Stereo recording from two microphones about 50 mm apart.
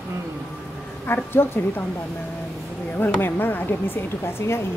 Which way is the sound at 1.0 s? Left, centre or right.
Left.